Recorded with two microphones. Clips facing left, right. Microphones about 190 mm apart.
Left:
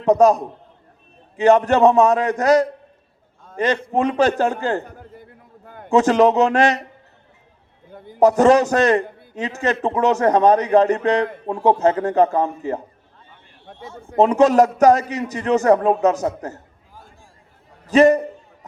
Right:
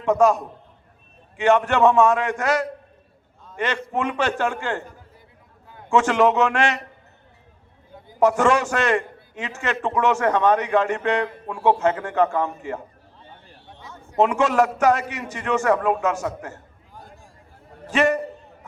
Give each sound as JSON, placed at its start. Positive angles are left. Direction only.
{"t": 0.0, "sound": "a man's voice", "side_deg": 40}
{"t": 5.6, "sound": "a sound", "side_deg": 55}
{"t": 5.9, "sound": "a man's voice", "side_deg": 40}
{"t": 8.2, "sound": "a man's voice", "side_deg": 40}
{"t": 14.2, "sound": "a man's voice", "side_deg": 40}
{"t": 17.9, "sound": "a man's voice", "side_deg": 40}